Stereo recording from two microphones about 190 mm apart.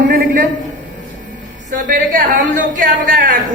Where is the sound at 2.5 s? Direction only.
50° right (ahead or behind).